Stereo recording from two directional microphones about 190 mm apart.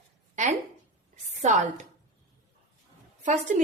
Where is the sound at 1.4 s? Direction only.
40° right (ahead or behind).